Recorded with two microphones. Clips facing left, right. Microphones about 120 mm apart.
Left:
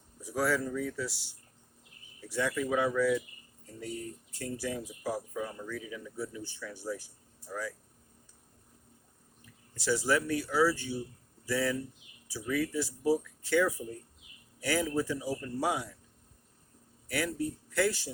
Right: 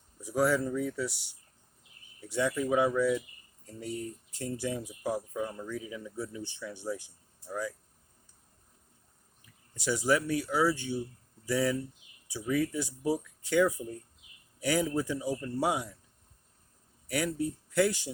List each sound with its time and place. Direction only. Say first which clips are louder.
0.3 s speech: right 3 dB; 20° right (ahead or behind)
2.3 s speech: right 2 dB; 20° right (ahead or behind)
4.3 s speech: right 1 dB; 25° right (ahead or behind)
9.7 s a man's voice: right 1 dB; 15° right (ahead or behind)
17.1 s speech: right 2 dB; 20° right (ahead or behind)